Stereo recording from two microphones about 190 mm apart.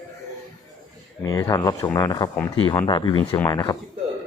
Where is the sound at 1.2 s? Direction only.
15° left (ahead or behind).